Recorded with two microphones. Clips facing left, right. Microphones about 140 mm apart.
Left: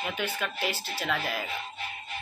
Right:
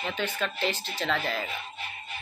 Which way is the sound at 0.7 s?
20° right (ahead or behind).